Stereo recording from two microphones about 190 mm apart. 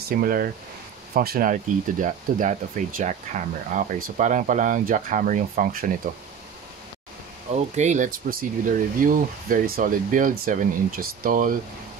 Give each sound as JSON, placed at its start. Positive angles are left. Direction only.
{"t": 0.1, "sound": "speech", "side_deg": -50}
{"t": 7.5, "sound": "speech", "side_deg": -40}